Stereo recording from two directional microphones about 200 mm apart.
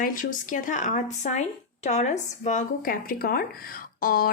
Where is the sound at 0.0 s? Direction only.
45° left (ahead or behind).